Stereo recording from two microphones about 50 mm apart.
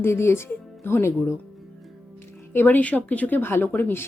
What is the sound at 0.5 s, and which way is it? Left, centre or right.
Music, left.